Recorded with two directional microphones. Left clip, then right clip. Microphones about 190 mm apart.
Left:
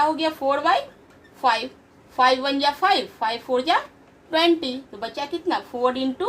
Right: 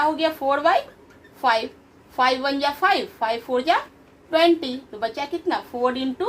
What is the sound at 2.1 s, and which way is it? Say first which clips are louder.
Speech: left 2 dB; 25° right (ahead or behind).